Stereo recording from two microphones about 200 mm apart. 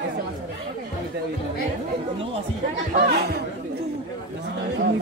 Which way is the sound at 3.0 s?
50° right (ahead or behind).